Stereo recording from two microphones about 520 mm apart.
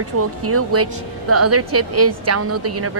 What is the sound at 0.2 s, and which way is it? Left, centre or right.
A woman's voice, right.